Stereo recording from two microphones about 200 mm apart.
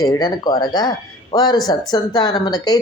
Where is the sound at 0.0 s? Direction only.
20° left (ahead or behind).